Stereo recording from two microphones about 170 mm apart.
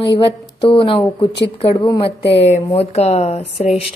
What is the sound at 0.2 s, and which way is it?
A woman's voice, 30° left (ahead or behind).